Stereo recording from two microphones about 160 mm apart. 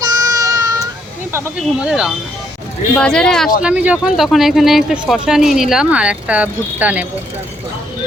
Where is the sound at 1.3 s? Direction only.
15° right (ahead or behind).